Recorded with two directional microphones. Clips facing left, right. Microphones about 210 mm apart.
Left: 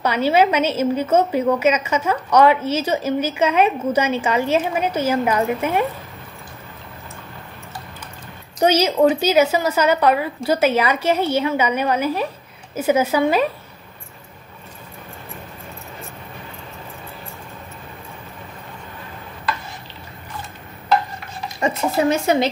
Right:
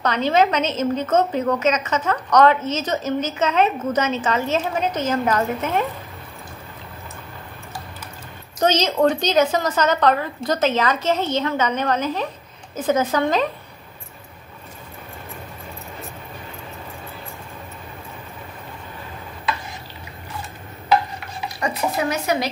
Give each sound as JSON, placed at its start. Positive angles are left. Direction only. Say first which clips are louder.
{"t": 0.0, "sound": "a woman's voice", "louder": "left 2 dB", "side_deg": 10}
{"t": 8.5, "sound": "a woman's voice", "louder": "left 3 dB", "side_deg": 10}
{"t": 21.5, "sound": "a woman's voice", "louder": "left 4 dB", "side_deg": 25}